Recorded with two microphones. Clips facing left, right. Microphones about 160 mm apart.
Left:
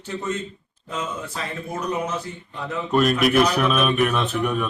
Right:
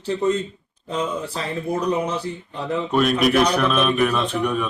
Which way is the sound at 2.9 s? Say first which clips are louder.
Even; centre (ahead or behind).